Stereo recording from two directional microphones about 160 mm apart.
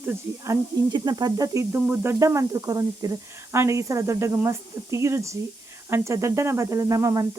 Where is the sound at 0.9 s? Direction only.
25° right (ahead or behind).